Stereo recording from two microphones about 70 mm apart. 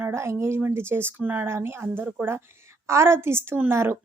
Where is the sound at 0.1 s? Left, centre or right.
Right.